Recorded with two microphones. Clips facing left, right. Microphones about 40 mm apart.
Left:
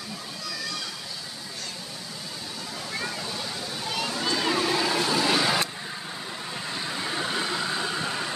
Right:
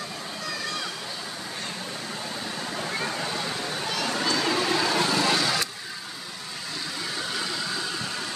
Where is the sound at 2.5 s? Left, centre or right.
Right.